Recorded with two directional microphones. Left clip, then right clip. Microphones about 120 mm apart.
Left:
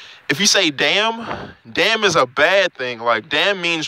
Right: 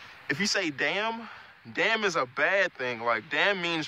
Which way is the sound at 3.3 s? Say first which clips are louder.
Left 9 dB; 55° left (ahead or behind).